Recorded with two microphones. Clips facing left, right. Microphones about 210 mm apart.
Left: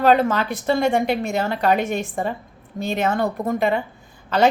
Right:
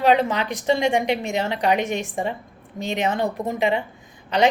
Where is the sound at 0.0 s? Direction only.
15° right (ahead or behind).